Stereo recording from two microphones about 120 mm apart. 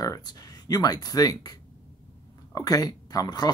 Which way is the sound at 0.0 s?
35° left (ahead or behind).